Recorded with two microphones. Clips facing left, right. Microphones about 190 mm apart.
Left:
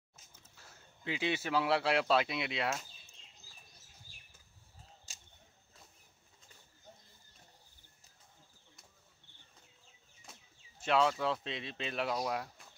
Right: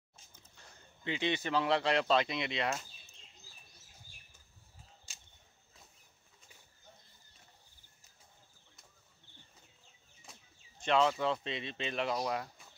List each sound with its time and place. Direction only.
0.3 s speech: 5° left (ahead or behind)
5.1 s a sound: 40° left (ahead or behind)
10.8 s speech: 5° left (ahead or behind)